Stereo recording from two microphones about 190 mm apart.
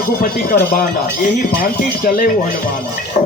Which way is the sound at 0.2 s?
45° left (ahead or behind).